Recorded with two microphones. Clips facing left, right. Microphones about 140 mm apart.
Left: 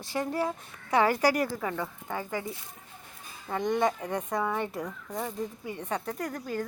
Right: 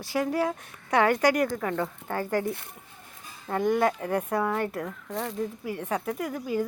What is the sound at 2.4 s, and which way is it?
Speech, 60° right (ahead or behind).